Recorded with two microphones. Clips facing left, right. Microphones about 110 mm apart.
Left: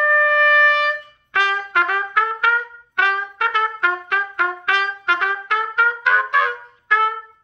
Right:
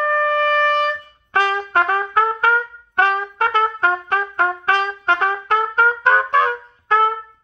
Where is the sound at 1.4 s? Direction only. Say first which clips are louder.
Right 1 dB; 40° right (ahead or behind).